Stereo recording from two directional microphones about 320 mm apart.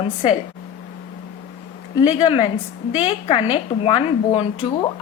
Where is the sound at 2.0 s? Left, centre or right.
Centre.